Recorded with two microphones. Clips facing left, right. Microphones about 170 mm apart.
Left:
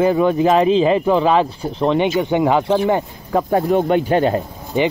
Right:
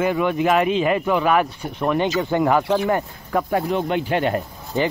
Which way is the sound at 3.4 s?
40° left (ahead or behind).